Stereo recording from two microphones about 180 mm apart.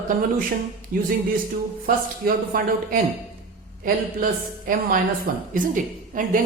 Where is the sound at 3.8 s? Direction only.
50° right (ahead or behind).